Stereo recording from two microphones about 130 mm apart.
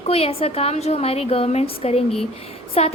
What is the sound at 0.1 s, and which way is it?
A woman's voice, 50° left (ahead or behind).